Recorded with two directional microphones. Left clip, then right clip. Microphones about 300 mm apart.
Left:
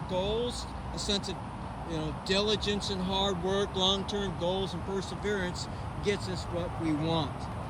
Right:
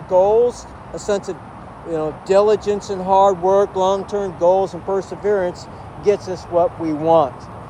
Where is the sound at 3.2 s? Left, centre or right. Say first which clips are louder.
Right 17 dB; centre.